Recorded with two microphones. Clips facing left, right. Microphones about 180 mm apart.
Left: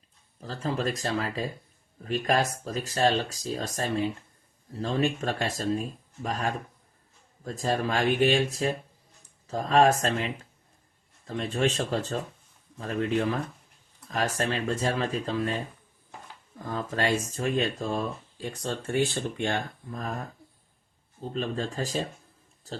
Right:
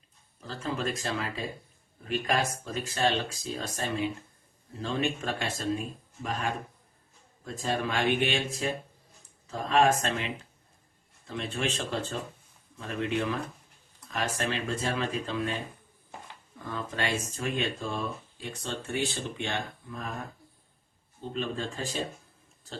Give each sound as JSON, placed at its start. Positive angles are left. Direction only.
{"t": 0.3, "sound": "speech", "side_deg": 40}
{"t": 16.6, "sound": "speech", "side_deg": 40}
{"t": 21.3, "sound": "speech", "side_deg": 40}